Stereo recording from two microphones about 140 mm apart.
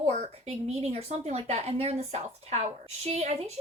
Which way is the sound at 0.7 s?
50° right (ahead or behind).